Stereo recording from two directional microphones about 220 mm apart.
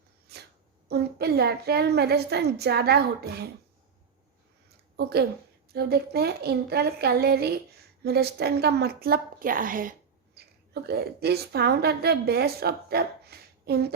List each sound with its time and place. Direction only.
0.3 s a sound: 45° right (ahead or behind)
0.9 s a woman's voice: 45° right (ahead or behind)
4.9 s a woman's voice: 45° right (ahead or behind)